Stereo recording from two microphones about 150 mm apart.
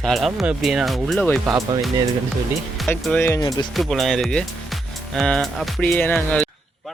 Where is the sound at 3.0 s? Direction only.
10° left (ahead or behind).